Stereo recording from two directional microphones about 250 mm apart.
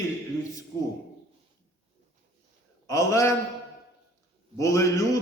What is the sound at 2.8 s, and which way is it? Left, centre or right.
Speech, centre.